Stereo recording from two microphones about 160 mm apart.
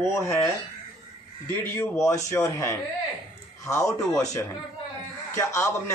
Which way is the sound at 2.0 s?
20° left (ahead or behind).